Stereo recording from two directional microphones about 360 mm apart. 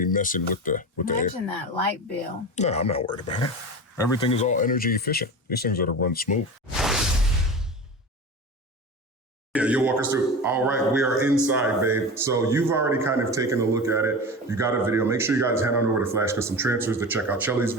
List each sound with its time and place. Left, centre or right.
0.0 s speech: left
6.7 s whoosh: centre
9.5 s a man's voice: centre